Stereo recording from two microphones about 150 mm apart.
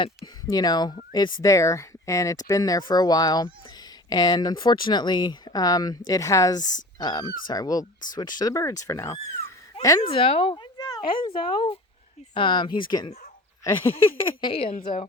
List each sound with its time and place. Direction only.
0.5 s speech: 25° left (ahead or behind)
10.1 s a woman's voice: 40° left (ahead or behind)
14.2 s a woman's voice: 35° left (ahead or behind)